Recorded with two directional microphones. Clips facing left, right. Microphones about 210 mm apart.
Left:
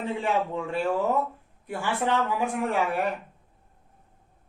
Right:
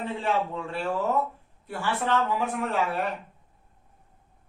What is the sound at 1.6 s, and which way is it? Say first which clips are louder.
A man's voice: left 1 dB; 15° left (ahead or behind).